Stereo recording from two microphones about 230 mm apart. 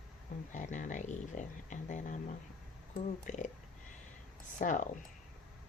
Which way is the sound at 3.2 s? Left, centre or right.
Left.